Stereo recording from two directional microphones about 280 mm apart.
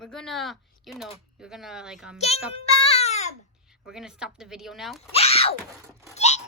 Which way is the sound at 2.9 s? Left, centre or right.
Left.